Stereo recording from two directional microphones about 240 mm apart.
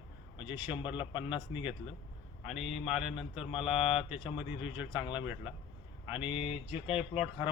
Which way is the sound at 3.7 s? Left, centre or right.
Left.